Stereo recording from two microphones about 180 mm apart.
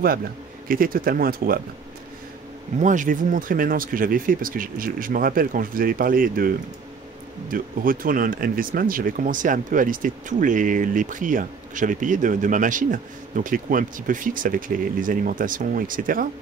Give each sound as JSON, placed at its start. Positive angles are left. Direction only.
{"t": 0.7, "sound": "speech", "side_deg": -50}
{"t": 2.8, "sound": "speech", "side_deg": -45}